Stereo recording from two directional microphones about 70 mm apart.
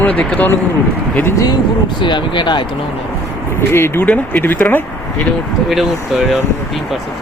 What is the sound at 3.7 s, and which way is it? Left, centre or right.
Speech, left.